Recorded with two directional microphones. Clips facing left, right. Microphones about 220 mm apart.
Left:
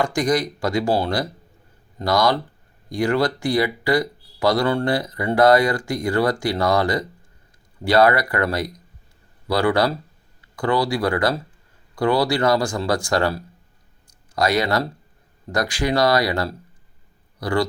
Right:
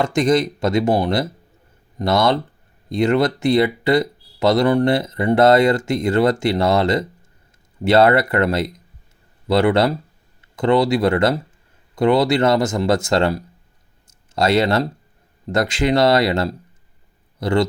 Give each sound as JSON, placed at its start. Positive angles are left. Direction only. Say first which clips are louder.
{"t": 0.0, "sound": "speech", "louder": "right 4 dB", "side_deg": -25}